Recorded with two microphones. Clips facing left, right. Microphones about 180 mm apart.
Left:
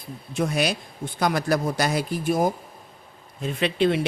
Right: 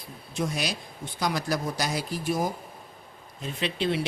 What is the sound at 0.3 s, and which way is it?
Speech, 60° left (ahead or behind).